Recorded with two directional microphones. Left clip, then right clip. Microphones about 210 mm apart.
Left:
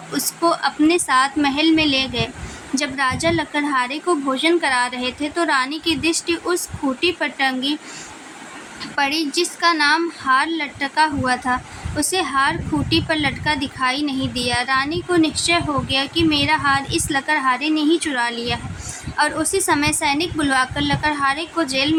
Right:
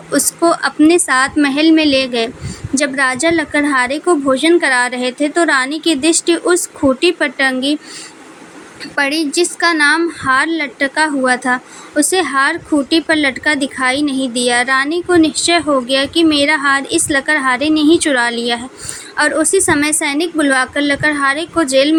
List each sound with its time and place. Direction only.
0.1 s speech: 20° right (ahead or behind)
9.0 s speech: 20° right (ahead or behind)